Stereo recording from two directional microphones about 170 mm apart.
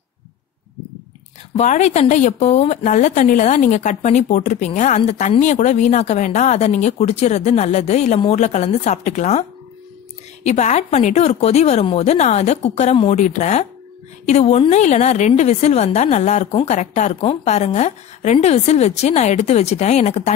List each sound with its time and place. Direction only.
1.6 s a woman's voice: 40° left (ahead or behind)